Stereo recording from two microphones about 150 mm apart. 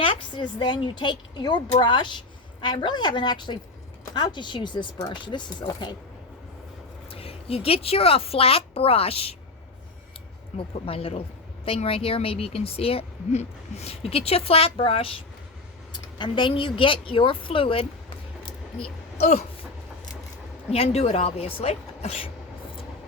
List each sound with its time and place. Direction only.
0.0 s a woman's voice: 35° left (ahead or behind)
7.1 s a woman's voice: 40° left (ahead or behind)
10.5 s a woman's voice: 45° left (ahead or behind)
19.2 s speech: 45° left (ahead or behind)
20.7 s a woman's voice: 45° left (ahead or behind)